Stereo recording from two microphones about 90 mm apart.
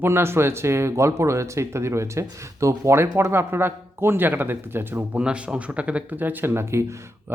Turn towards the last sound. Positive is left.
turn(degrees=-25)  # may be behind; listen again after turning